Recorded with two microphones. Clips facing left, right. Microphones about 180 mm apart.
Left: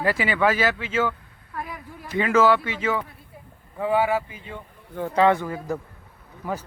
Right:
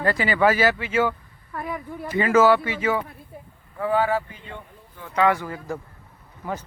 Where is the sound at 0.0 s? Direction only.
5° left (ahead or behind).